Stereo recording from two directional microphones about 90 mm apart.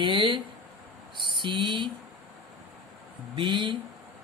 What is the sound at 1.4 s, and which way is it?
Speech, 65° right (ahead or behind).